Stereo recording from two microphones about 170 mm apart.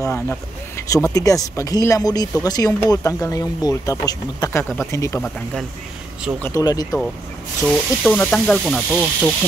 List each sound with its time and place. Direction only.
0.0 s speech: 15° left (ahead or behind)
5.2 s speech: centre (ahead or behind)
6.4 s speech: 20° left (ahead or behind)
7.6 s speech: 5° left (ahead or behind)